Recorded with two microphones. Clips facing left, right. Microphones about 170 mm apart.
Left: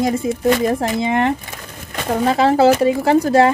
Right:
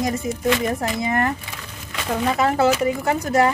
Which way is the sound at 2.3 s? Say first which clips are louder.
Left 6 dB; 30° left (ahead or behind).